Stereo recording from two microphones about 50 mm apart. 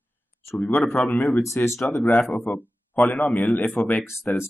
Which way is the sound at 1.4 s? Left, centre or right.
Left.